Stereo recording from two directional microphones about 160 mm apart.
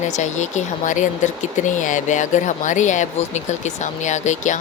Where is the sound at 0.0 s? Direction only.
50° left (ahead or behind).